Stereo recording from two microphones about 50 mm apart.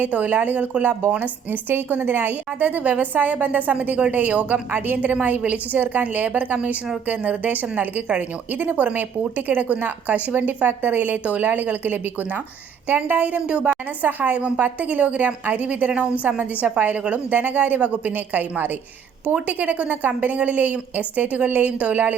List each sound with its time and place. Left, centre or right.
0.0 s a woman's voice: right
1.7 s a woman's voice: right
14.0 s a woman's voice: right